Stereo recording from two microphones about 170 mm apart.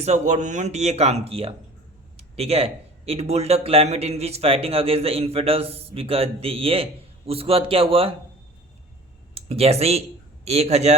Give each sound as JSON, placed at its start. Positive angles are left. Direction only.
{"t": 0.0, "sound": "a man's voice", "side_deg": -45}
{"t": 9.3, "sound": "a man's voice", "side_deg": -35}